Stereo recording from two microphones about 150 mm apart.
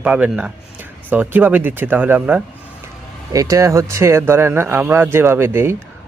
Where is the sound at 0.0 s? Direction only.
10° right (ahead or behind).